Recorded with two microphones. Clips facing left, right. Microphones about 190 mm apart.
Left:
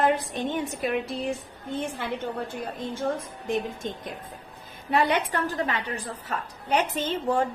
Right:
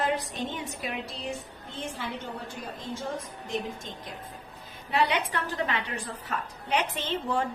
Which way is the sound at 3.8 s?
55° left (ahead or behind).